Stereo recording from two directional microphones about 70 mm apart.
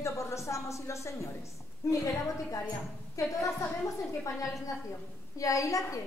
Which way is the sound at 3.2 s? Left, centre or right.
Left.